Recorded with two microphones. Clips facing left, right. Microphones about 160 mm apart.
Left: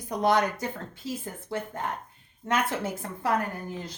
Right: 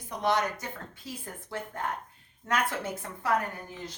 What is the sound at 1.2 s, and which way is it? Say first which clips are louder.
Speech: left 4 dB; 25° left (ahead or behind).